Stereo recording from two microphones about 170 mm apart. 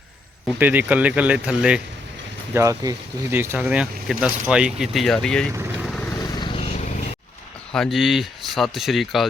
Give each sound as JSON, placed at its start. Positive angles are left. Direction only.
{"t": 0.6, "sound": "speech", "side_deg": -10}
{"t": 2.5, "sound": "speech", "side_deg": -15}
{"t": 6.1, "sound": "vehicle", "side_deg": 30}
{"t": 7.7, "sound": "speech", "side_deg": 0}